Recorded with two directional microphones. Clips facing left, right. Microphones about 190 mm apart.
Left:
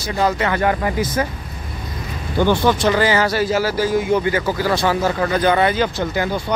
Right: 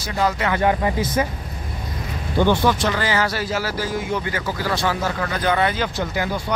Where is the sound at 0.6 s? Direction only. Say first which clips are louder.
Left 1 dB; 20° right (ahead or behind).